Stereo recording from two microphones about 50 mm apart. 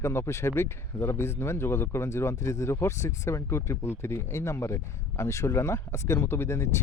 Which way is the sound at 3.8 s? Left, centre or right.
Left.